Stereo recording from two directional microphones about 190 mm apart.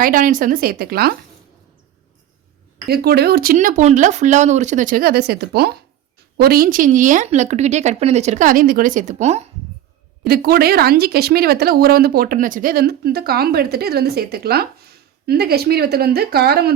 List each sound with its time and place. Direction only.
0.0 s speech: 45° right (ahead or behind)
2.8 s a woman's voice: 55° right (ahead or behind); by 9.5 s 35° right (ahead or behind)
10.2 s speech: 55° right (ahead or behind)